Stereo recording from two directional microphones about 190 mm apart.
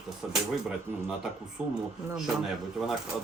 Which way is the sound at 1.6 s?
5° right (ahead or behind).